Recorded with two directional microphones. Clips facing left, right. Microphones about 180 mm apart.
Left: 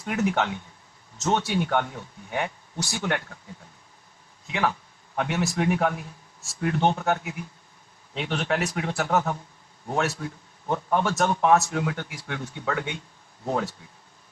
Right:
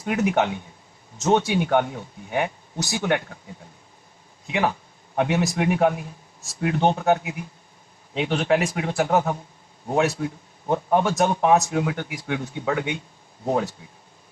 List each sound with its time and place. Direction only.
0.1 s speech: 15° right (ahead or behind)
5.1 s speech: 15° right (ahead or behind)